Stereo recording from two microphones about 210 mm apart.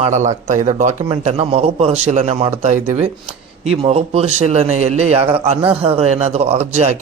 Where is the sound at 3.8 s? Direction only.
30° right (ahead or behind).